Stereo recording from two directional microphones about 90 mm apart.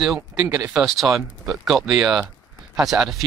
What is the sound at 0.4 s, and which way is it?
Speech, 15° right (ahead or behind).